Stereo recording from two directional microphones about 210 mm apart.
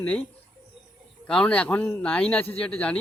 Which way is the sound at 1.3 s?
5° left (ahead or behind).